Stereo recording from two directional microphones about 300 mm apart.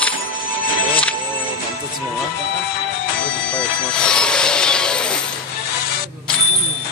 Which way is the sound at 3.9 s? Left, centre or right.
Centre.